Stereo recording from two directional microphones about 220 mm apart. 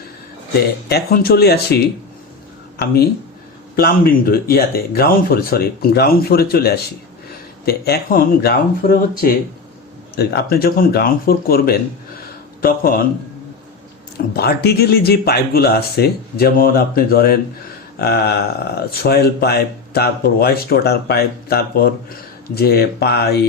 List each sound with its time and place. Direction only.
0.9 s speech: 45° left (ahead or behind)
3.8 s speech: 45° left (ahead or behind)
14.3 s speech: 45° left (ahead or behind)